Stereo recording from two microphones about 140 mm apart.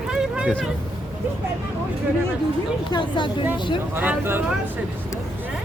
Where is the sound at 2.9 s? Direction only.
35° left (ahead or behind).